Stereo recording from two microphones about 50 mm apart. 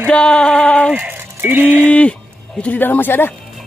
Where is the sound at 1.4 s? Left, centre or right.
Right.